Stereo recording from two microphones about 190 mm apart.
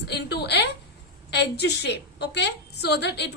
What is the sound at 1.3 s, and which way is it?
A woman's voice, 60° left (ahead or behind).